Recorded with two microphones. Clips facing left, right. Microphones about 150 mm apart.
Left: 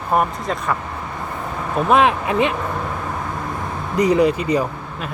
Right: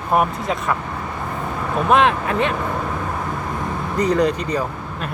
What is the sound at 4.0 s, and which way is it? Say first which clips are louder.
Speech: left 3 dB; 10° left (ahead or behind).